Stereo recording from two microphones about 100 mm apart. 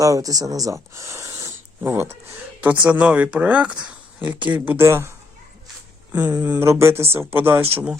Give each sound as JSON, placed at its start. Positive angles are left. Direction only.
{"t": 0.0, "sound": "speech", "side_deg": -35}
{"t": 1.8, "sound": "speech", "side_deg": -25}
{"t": 6.4, "sound": "speech", "side_deg": -20}